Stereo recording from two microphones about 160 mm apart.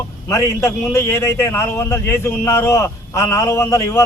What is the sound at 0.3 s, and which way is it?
A man's voice, 20° left (ahead or behind).